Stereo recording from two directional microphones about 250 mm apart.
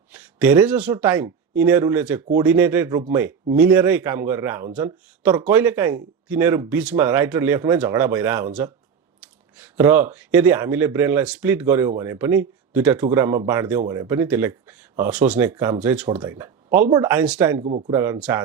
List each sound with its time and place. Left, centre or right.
0.1 s a sound: centre
0.9 s speech: centre
17.6 s speech: right
17.8 s speech: centre